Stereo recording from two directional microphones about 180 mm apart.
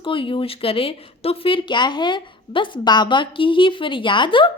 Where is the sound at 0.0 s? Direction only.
30° left (ahead or behind).